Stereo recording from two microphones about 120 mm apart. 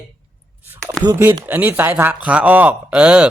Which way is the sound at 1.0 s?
20° right (ahead or behind).